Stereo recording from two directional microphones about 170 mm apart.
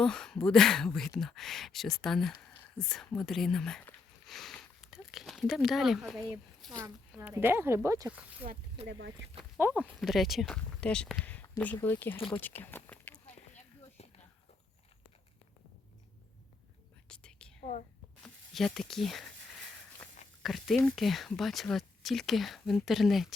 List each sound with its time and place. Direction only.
0.0 s speech: 5° left (ahead or behind)
6.6 s a sound: centre (ahead or behind)
7.2 s speech: 15° right (ahead or behind)
8.9 s speech: 90° right
9.6 s speech: 10° right (ahead or behind); by 12.1 s 10° left (ahead or behind)
12.1 s speech: 30° left (ahead or behind)
12.4 s speech: 10° left (ahead or behind)
17.1 s whispering: 5° left (ahead or behind)
18.2 s speech: centre (ahead or behind)
20.4 s speech: centre (ahead or behind)